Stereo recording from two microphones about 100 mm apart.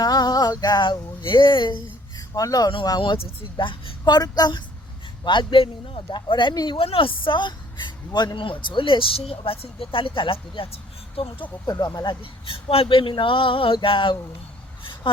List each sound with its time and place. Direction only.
0.0 s music: 40° left (ahead or behind)
3.6 s speech: 55° left (ahead or behind)
6.7 s speech: 65° left (ahead or behind)
11.6 s speech: 40° left (ahead or behind)
12.2 s speech: 70° left (ahead or behind); by 15.2 s 55° left (ahead or behind)